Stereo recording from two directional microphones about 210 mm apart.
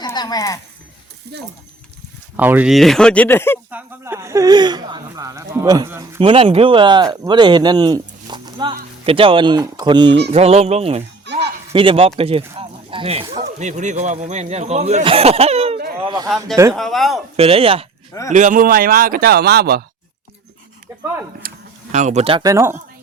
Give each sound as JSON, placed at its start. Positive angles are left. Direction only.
{"t": 0.0, "sound": "a sound", "side_deg": 20}
{"t": 1.3, "sound": "speech", "side_deg": -55}
{"t": 2.3, "sound": "speech", "side_deg": -10}
{"t": 3.7, "sound": "speech", "side_deg": -10}
{"t": 12.5, "sound": "a sound", "side_deg": -25}
{"t": 13.6, "sound": "speech", "side_deg": -35}
{"t": 16.0, "sound": "a sound", "side_deg": -20}
{"t": 16.7, "sound": "speech", "side_deg": 0}
{"t": 17.3, "sound": "speech", "side_deg": -25}
{"t": 18.3, "sound": "speech", "side_deg": -35}
{"t": 21.4, "sound": "a sound", "side_deg": -45}
{"t": 21.9, "sound": "speech", "side_deg": -35}